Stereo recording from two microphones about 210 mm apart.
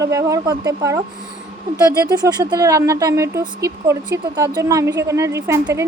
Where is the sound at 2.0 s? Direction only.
20° right (ahead or behind).